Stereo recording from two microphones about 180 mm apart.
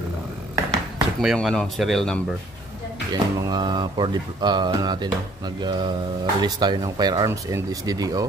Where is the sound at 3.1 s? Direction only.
25° right (ahead or behind).